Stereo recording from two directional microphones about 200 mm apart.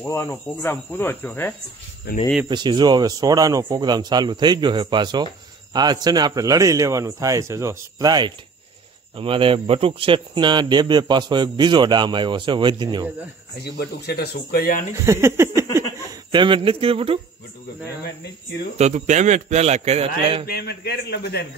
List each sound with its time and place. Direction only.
0.0 s speech: 15° left (ahead or behind)
2.1 s speech: 50° left (ahead or behind)
2.4 s speech: 20° right (ahead or behind)
13.7 s speech: 55° left (ahead or behind)
15.0 s speech: 10° right (ahead or behind)
16.3 s speech: 25° right (ahead or behind)
18.8 s a man's voice: 35° right (ahead or behind)
20.4 s speech: 50° left (ahead or behind)